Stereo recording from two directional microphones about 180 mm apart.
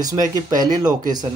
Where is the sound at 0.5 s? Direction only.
20° right (ahead or behind).